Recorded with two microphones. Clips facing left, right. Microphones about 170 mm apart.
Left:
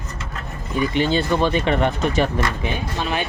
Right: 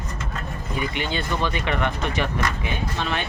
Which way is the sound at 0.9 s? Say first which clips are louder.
Left 11 dB; 30° left (ahead or behind).